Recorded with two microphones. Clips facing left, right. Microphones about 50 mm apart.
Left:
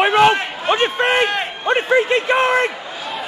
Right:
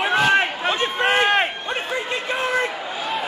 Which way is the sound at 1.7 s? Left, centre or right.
Left.